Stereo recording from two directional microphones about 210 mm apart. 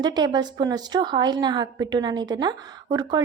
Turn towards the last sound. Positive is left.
turn(degrees=-20)  # may be behind; listen again after turning